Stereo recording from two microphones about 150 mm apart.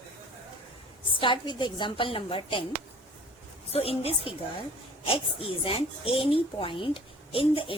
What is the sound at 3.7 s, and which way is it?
A child's voice, 40° left (ahead or behind).